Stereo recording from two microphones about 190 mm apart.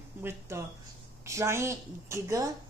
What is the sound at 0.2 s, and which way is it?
A woman's voice, 15° right (ahead or behind).